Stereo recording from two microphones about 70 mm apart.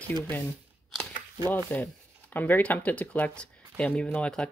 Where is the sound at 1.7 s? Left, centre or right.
Left.